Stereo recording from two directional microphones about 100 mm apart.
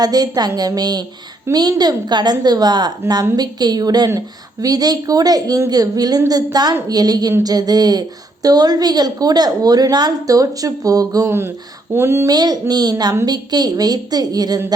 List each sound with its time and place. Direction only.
0.0 s a woman's voice: 40° right (ahead or behind)
1.5 s speech: 25° right (ahead or behind)
1.8 s a woman's voice: 45° right (ahead or behind)
11.3 s speech: 25° right (ahead or behind)
12.3 s a woman's voice: 45° right (ahead or behind)